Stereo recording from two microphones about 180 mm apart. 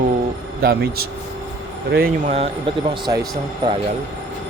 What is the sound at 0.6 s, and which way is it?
Speech, 60° right (ahead or behind).